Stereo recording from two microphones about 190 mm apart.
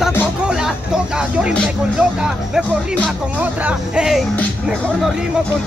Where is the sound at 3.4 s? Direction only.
5° right (ahead or behind).